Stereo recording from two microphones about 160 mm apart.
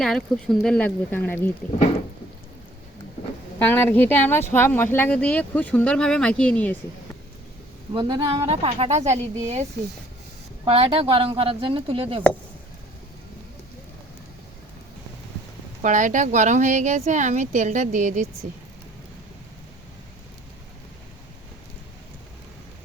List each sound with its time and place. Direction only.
0.0 s speech: 5° left (ahead or behind)
3.6 s speech: 10° left (ahead or behind)
7.9 s speech: 30° right (ahead or behind)
10.7 s speech: 35° right (ahead or behind)
15.8 s speech: 50° right (ahead or behind)